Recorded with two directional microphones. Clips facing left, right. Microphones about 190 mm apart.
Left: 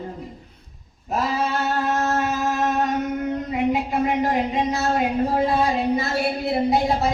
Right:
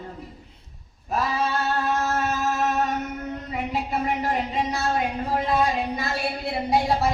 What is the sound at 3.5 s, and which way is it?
A woman's voice, 15° left (ahead or behind).